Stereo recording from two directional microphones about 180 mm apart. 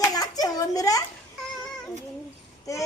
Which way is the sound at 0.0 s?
20° left (ahead or behind).